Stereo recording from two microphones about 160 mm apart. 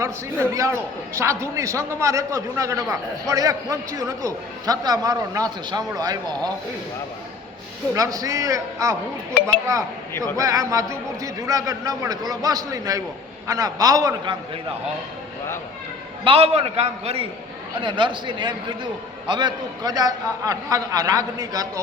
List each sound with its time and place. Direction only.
0.0 s a man's voice: 20° right (ahead or behind)
7.9 s a man's voice: 20° right (ahead or behind)
16.2 s a man's voice: 35° right (ahead or behind)